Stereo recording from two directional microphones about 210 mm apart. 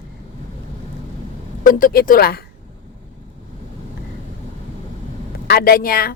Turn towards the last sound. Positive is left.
turn(degrees=45)  # may be behind; listen again after turning